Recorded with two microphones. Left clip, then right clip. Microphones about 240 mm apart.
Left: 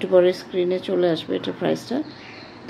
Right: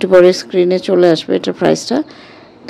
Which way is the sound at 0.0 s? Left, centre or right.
Right.